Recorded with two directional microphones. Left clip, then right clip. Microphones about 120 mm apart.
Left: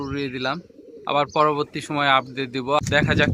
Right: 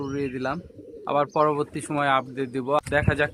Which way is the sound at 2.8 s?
20° left (ahead or behind).